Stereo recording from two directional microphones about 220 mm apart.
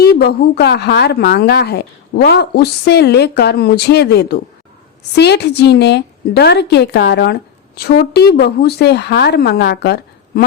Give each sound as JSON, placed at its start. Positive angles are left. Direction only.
{"t": 0.0, "sound": "speech", "side_deg": 45}